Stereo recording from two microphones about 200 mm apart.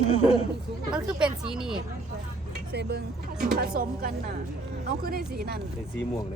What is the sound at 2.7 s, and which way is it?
Speech, 55° right (ahead or behind).